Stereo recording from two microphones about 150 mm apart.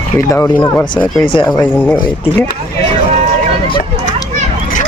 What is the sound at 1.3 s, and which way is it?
Speech, 35° left (ahead or behind).